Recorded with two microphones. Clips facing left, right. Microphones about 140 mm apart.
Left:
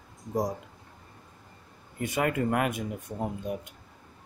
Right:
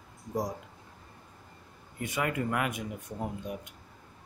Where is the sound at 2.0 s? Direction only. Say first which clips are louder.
Left 4 dB; 35° left (ahead or behind).